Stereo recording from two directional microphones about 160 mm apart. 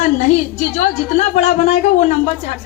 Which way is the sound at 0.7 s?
45° left (ahead or behind).